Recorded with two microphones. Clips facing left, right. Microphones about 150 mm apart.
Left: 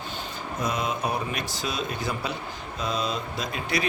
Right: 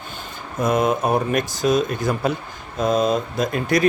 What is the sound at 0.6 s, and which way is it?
Speech, 50° right (ahead or behind).